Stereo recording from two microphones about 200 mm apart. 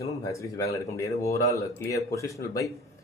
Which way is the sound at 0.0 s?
15° left (ahead or behind).